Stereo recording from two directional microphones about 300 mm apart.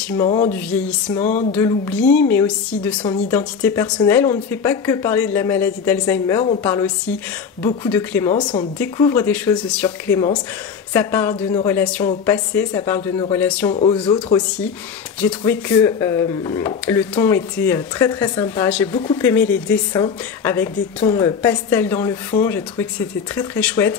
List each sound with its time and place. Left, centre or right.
0.2 s speech: centre
1.2 s a sound: left
1.5 s speech: centre
13.7 s speech: centre
15.1 s speech: centre